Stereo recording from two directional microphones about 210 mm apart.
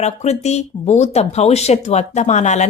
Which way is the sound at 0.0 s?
30° left (ahead or behind).